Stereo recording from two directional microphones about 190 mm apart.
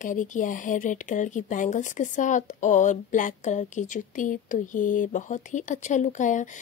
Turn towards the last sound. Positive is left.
turn(degrees=40)  # may be behind; listen again after turning